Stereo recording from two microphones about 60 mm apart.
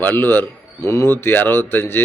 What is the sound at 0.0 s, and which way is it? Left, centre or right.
A man's voice, left.